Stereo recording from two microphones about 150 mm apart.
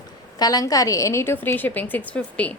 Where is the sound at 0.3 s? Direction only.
25° left (ahead or behind).